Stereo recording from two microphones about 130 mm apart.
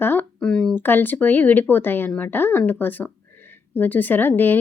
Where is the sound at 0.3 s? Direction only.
5° left (ahead or behind).